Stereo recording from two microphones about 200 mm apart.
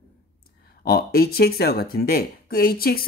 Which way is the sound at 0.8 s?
50° left (ahead or behind).